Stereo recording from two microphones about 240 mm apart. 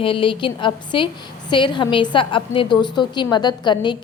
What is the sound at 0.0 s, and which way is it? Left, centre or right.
A woman's voice, left.